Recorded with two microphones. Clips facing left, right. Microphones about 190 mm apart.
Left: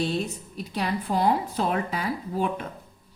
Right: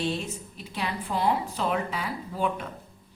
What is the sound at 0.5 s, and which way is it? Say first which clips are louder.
A woman's voice: left 5 dB; 40° left (ahead or behind).